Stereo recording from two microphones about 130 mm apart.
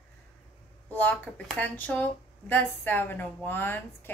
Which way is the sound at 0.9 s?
15° left (ahead or behind).